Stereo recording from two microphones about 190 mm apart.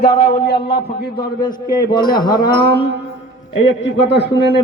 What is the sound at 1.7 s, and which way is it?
Speech, 20° left (ahead or behind).